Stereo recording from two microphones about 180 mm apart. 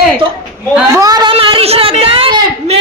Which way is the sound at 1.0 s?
20° right (ahead or behind).